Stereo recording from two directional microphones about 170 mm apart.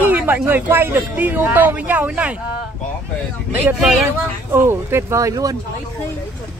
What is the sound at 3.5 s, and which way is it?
Speech, 10° right (ahead or behind).